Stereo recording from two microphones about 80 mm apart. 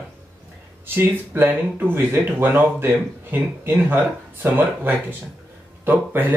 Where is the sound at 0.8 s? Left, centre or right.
Right.